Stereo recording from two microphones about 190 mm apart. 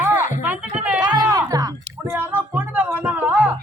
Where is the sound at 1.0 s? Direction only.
20° right (ahead or behind).